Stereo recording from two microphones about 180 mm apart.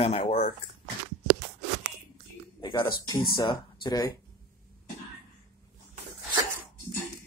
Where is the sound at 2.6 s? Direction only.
25° left (ahead or behind).